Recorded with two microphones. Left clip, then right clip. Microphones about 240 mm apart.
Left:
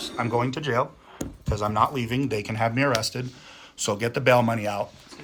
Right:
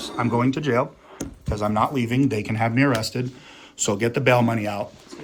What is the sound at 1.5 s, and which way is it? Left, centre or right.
Speech, centre.